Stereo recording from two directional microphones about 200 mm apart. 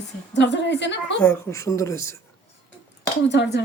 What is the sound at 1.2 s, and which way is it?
Speech, 10° left (ahead or behind).